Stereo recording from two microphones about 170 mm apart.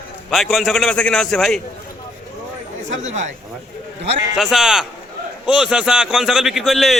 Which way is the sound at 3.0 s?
45° right (ahead or behind).